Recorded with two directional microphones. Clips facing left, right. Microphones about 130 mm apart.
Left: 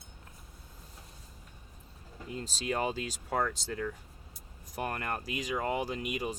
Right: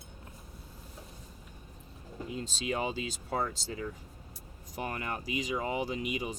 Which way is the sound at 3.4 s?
55° left (ahead or behind).